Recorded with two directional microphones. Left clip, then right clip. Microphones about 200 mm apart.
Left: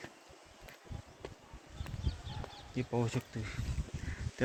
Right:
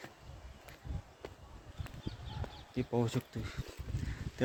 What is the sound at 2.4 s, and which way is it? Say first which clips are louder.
Speech: right 1 dB; 20° right (ahead or behind).